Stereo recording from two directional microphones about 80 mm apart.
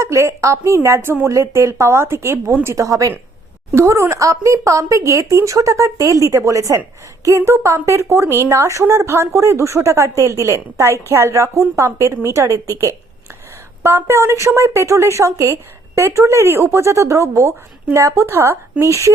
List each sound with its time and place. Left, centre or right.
0.0 s speech: right